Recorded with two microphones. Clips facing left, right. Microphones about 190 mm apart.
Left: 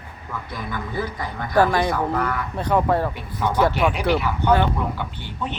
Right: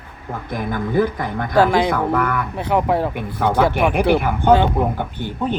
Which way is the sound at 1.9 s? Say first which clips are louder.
Right 4 dB; 55° right (ahead or behind).